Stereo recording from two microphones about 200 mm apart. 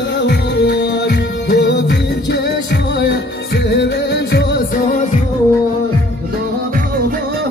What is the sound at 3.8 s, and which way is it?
Music, 55° left (ahead or behind).